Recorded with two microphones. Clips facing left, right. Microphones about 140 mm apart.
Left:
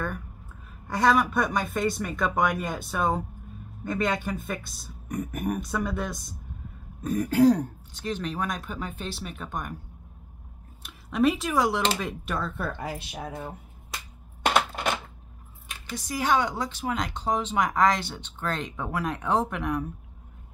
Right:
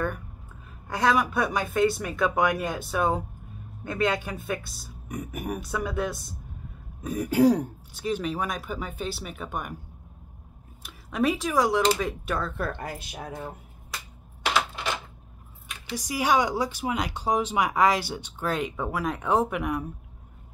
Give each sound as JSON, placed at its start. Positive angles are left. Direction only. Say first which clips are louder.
{"t": 0.8, "sound": "speech", "louder": "left 1 dB", "side_deg": 0}
{"t": 10.8, "sound": "speech", "louder": "left 2 dB", "side_deg": 0}
{"t": 14.4, "sound": "coin", "louder": "left 3 dB", "side_deg": 50}
{"t": 16.0, "sound": "speech", "louder": "right 1 dB", "side_deg": -10}